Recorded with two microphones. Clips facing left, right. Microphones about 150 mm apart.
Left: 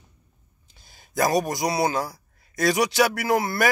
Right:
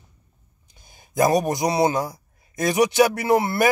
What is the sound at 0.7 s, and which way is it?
A man's voice, 20° right (ahead or behind).